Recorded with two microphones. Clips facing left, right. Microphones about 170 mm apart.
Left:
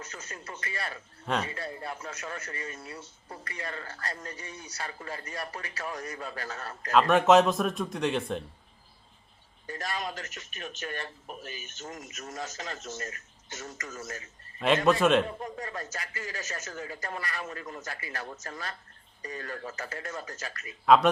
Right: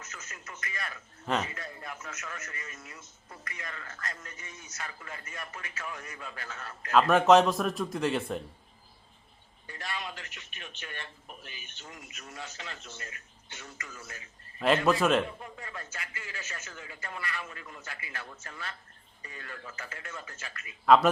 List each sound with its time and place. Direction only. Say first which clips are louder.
0.0 s speech: left 5 dB; 30° left (ahead or behind)
1.2 s a man's voice: even; 5° right (ahead or behind)
1.5 s speech: left 5 dB; 30° left (ahead or behind)
6.9 s a man's voice: even; centre (ahead or behind)
9.6 s speech: left 5 dB; 40° left (ahead or behind)
14.8 s a man's voice: left 4 dB; centre (ahead or behind)
15.4 s speech: left 6 dB; 40° left (ahead or behind)
20.8 s a man's voice: left 1 dB; centre (ahead or behind)